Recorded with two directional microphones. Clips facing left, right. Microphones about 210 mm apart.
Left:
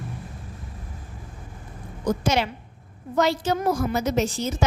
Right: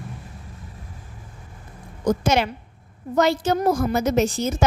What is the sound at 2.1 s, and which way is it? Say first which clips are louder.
A woman's voice: right 3 dB; 50° right (ahead or behind).